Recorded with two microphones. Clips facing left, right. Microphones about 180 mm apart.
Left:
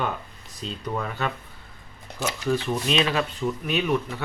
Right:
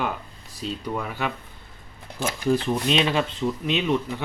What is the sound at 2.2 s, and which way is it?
Speech, 55° right (ahead or behind).